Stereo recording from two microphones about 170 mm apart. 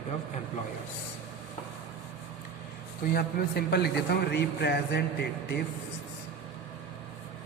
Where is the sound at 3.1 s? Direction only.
70° left (ahead or behind).